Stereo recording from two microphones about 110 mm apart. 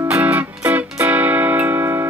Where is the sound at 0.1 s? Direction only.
15° right (ahead or behind).